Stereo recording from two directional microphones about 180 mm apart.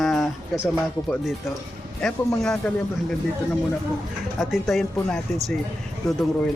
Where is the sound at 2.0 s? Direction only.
5° left (ahead or behind).